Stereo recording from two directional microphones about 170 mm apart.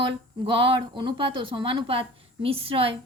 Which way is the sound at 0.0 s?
30° right (ahead or behind).